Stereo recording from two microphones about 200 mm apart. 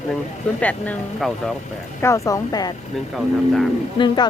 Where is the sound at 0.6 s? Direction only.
5° left (ahead or behind).